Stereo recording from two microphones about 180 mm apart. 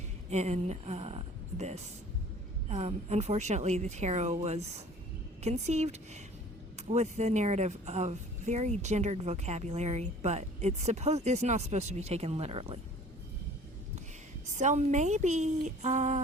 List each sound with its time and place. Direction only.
0.3 s a woman's voice: 40° right (ahead or behind)
14.5 s a woman's voice: 40° right (ahead or behind)